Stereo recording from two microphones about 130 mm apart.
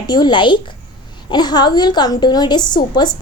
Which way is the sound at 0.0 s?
35° left (ahead or behind).